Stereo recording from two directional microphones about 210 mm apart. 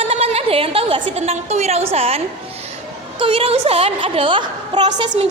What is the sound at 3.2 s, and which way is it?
A woman's voice, 25° right (ahead or behind).